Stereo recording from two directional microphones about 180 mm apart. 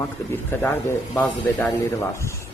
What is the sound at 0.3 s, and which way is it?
Speech, 10° left (ahead or behind).